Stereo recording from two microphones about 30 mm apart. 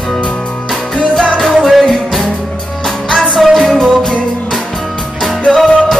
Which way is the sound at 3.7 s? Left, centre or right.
Left.